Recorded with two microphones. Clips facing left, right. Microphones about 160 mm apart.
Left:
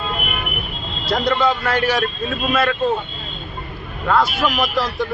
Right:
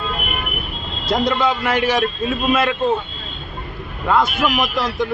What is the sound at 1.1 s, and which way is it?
Speech, 15° right (ahead or behind).